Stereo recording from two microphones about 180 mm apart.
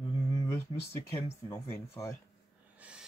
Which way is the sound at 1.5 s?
15° left (ahead or behind).